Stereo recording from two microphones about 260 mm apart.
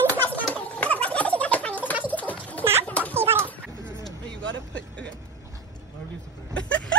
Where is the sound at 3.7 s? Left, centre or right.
Centre.